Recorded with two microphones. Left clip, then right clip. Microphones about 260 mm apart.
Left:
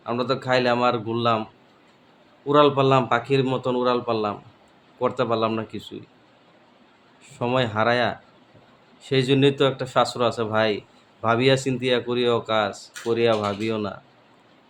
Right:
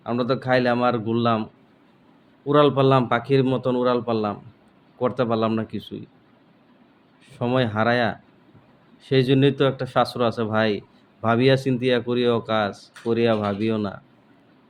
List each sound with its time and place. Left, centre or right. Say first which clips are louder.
0.0 s speech: right 1 dB; centre
2.5 s speech: even; centre
7.3 s speech: even; centre